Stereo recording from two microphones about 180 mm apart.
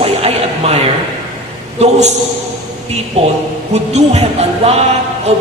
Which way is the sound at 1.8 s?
40° right (ahead or behind).